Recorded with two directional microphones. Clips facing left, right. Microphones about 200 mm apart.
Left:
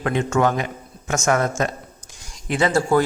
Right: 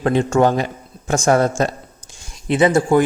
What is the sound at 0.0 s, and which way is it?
A man's voice, 30° right (ahead or behind).